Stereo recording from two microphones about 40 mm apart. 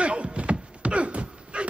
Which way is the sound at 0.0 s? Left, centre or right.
Right.